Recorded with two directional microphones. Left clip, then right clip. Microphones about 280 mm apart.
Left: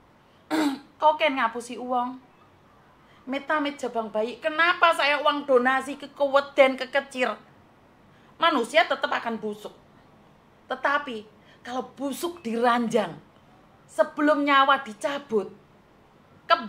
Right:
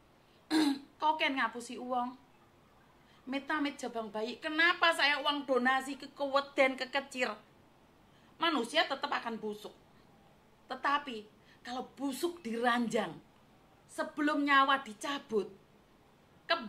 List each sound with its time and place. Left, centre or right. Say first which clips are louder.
0.5 s throat clearing: left 5 dB; right
3.3 s a woman's voice: left 9 dB; right
8.4 s a woman's voice: left 10 dB; right
10.7 s a woman's voice: left 8 dB; right